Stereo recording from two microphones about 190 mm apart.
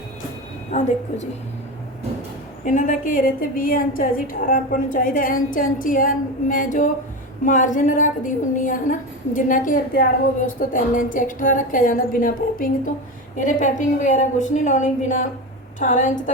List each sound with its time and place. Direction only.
0.7 s a woman's voice: 35° left (ahead or behind)
2.6 s a woman's voice: 40° left (ahead or behind)